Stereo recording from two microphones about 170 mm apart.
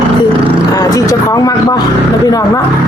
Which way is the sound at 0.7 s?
20° left (ahead or behind).